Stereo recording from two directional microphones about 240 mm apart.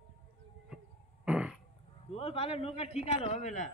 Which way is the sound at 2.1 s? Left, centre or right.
Left.